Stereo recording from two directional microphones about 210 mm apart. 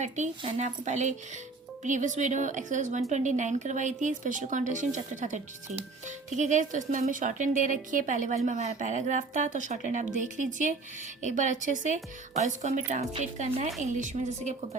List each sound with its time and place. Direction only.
0.0 s a woman's voice: 35° right (ahead or behind)